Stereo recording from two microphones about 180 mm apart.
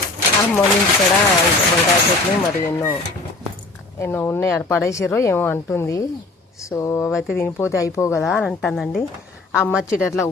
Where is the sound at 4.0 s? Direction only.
10° left (ahead or behind).